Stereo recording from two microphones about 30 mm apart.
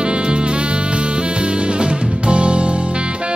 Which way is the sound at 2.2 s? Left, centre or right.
Right.